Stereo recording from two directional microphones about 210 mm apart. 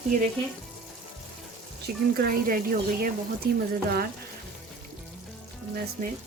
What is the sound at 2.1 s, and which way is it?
Speech, 45° right (ahead or behind).